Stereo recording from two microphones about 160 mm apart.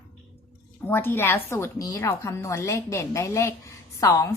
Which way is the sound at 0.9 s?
15° left (ahead or behind).